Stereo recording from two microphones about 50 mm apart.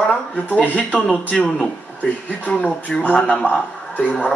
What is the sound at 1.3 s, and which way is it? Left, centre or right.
Speech, centre.